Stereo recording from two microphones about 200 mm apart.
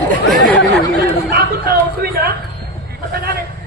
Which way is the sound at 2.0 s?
50° right (ahead or behind).